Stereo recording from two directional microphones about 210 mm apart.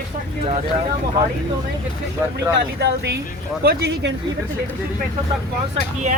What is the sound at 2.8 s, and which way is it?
Speech, 50° right (ahead or behind).